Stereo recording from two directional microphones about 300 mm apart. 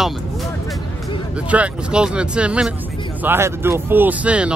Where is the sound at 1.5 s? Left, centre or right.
Centre.